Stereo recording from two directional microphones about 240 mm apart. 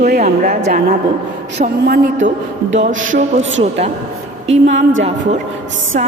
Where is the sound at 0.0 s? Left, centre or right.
Right.